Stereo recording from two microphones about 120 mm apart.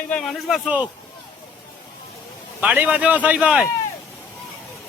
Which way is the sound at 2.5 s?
15° right (ahead or behind).